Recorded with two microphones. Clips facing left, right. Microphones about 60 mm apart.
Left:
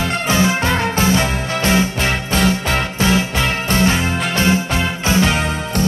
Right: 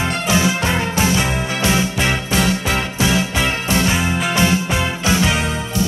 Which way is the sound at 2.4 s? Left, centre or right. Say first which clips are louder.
Left 3 dB; centre.